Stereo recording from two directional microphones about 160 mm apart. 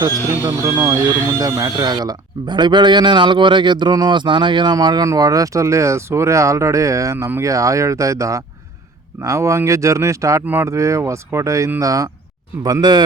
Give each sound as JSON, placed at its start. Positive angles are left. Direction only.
{"t": 0.4, "sound": "speech", "side_deg": -20}